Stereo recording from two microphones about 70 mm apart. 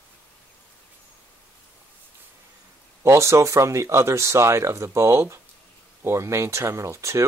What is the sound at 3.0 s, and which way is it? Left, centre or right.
Speech, right.